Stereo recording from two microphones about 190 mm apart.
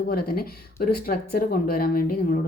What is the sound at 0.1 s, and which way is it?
Speech, 50° left (ahead or behind).